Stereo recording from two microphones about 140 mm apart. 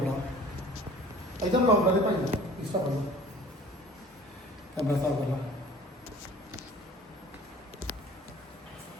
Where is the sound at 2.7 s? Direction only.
40° right (ahead or behind).